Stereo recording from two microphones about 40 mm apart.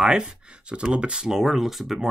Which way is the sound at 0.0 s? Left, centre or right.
Centre.